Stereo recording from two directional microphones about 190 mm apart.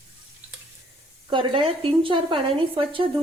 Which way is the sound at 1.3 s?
25° right (ahead or behind).